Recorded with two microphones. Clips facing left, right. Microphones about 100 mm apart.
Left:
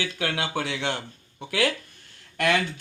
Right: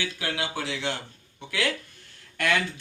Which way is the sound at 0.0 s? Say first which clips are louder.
Left 2 dB; 55° left (ahead or behind).